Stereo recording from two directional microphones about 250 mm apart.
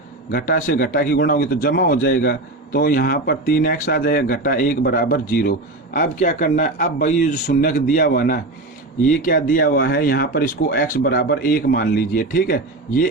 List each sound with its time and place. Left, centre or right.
0.3 s a man's voice: left